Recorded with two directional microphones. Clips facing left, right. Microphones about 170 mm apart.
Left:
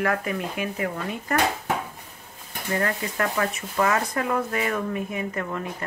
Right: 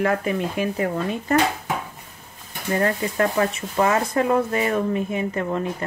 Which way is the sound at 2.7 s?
30° right (ahead or behind).